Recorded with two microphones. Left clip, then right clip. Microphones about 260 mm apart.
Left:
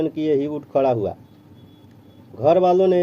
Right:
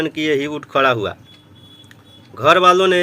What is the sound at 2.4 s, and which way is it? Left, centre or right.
Speech, centre.